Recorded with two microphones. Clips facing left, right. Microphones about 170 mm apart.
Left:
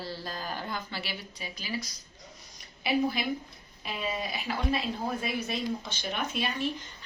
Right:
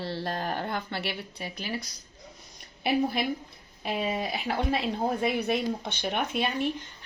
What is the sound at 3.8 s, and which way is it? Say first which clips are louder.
Speech: right 5 dB; 60° right (ahead or behind).